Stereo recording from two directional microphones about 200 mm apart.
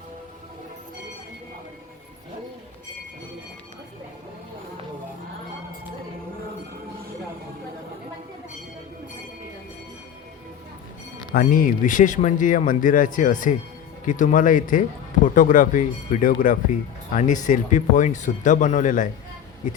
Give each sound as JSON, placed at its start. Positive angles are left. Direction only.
{"t": 11.3, "sound": "a man's voice", "side_deg": 45}